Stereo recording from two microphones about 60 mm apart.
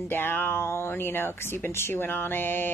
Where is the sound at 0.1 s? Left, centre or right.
Left.